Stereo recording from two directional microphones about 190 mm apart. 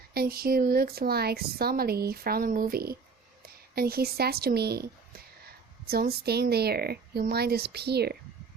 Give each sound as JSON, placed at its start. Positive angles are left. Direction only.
{"t": 0.1, "sound": "speech", "side_deg": -55}